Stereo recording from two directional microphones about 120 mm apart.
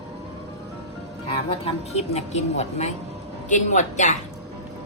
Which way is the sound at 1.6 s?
60° left (ahead or behind).